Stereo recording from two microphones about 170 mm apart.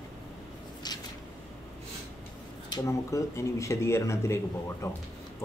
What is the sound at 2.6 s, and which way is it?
Speech, 20° left (ahead or behind).